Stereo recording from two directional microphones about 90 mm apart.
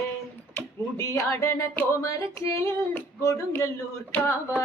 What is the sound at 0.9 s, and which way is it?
Music, 30° left (ahead or behind).